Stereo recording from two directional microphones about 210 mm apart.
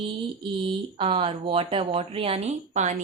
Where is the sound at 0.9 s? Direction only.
25° right (ahead or behind).